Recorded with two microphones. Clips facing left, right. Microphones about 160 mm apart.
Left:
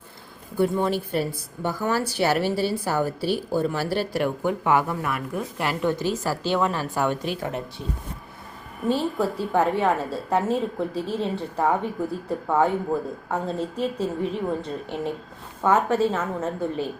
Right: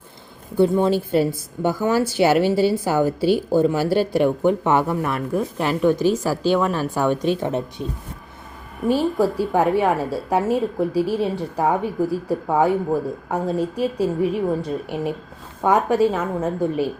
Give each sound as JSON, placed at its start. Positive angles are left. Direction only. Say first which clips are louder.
{"t": 0.5, "sound": "a woman's voice", "louder": "right 5 dB", "side_deg": -25}
{"t": 5.5, "sound": "a woman's voice", "louder": "right 5 dB", "side_deg": -15}
{"t": 9.2, "sound": "a woman's voice", "louder": "right 1 dB", "side_deg": -10}